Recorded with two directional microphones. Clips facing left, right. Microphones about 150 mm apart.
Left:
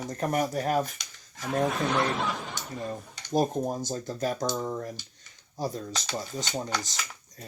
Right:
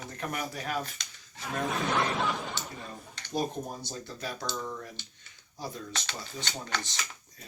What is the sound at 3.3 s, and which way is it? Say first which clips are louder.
Speech: left 7 dB; 45° left (ahead or behind).